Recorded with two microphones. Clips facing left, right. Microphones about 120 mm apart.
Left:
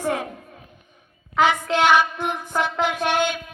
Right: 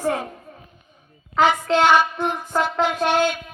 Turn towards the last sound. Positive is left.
turn(degrees=0)  # may be behind; listen again after turning